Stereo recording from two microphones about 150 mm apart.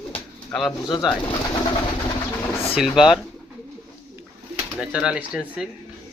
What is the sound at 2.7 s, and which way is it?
Speech, 5° right (ahead or behind).